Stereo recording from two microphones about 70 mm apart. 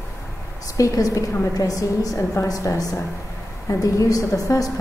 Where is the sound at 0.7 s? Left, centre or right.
Left.